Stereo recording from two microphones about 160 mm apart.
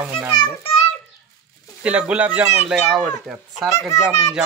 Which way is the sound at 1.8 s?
10° right (ahead or behind).